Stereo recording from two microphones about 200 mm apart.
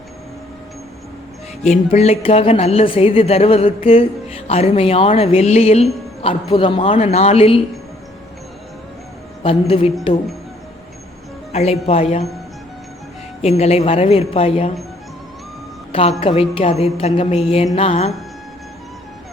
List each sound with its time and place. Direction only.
1.6 s a woman's voice: 35° left (ahead or behind)
9.4 s a woman's voice: 25° left (ahead or behind)
11.5 s speech: 30° left (ahead or behind)
13.4 s a woman's voice: 30° left (ahead or behind)
15.9 s a woman's voice: 25° left (ahead or behind)